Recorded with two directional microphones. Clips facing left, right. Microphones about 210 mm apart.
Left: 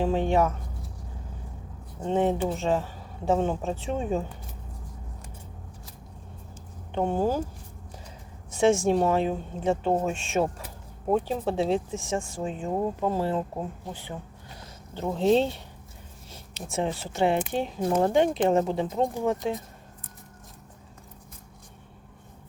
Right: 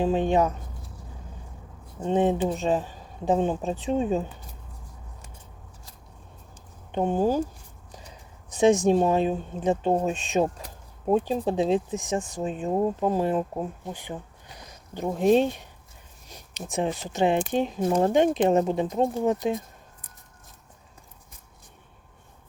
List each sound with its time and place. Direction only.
0.0 s speech: 20° right (ahead or behind)
2.0 s speech: 15° right (ahead or behind)
6.9 s speech: 15° right (ahead or behind)
8.4 s a woman's voice: 20° right (ahead or behind)